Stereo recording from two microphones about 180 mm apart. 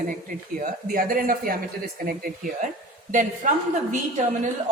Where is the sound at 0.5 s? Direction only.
50° right (ahead or behind).